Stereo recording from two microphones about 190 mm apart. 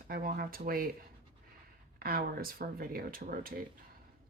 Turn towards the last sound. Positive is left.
turn(degrees=-50)  # may be behind; listen again after turning